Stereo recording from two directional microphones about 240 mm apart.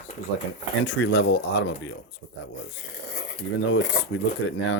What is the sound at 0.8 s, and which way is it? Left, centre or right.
Speech, left.